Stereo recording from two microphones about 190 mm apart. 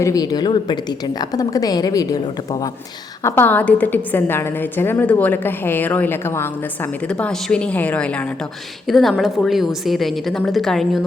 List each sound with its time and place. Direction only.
0.0 s a woman's voice: 20° left (ahead or behind); by 11.0 s centre (ahead or behind)